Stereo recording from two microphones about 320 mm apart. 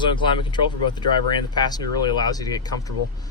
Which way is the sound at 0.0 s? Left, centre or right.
Centre.